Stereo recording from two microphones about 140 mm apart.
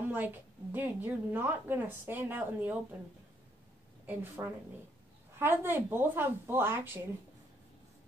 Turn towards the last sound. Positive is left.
turn(degrees=-15)  # may be behind; listen again after turning